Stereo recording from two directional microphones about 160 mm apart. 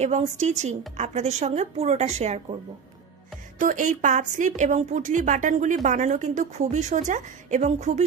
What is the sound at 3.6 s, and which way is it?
A woman's voice, 50° right (ahead or behind).